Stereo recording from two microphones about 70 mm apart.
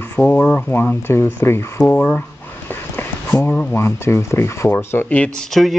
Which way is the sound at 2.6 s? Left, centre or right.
Left.